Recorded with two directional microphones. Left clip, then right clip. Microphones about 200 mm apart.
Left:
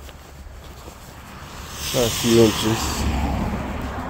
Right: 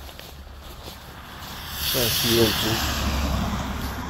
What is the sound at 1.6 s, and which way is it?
Vehicle, 5° left (ahead or behind).